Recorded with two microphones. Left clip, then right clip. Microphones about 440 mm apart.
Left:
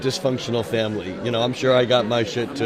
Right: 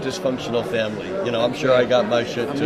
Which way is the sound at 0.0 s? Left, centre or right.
Left.